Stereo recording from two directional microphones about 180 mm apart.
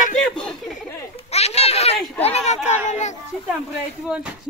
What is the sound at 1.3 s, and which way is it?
Children playing, 35° left (ahead or behind).